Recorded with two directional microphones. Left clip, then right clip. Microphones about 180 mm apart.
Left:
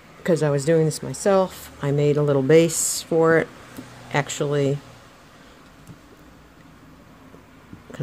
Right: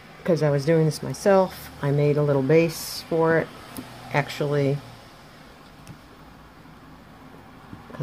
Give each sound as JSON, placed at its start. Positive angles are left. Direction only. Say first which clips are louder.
{"t": 0.2, "sound": "speech", "louder": "left 1 dB", "side_deg": 15}
{"t": 2.6, "sound": "speech", "louder": "left 4 dB", "side_deg": 50}
{"t": 3.1, "sound": "speech", "louder": "left 3 dB", "side_deg": 25}